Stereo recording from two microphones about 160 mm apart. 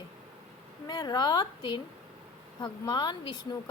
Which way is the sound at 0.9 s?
25° left (ahead or behind).